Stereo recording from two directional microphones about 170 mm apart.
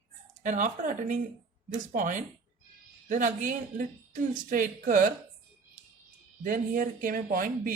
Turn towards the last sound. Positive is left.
turn(degrees=-55)  # may be behind; listen again after turning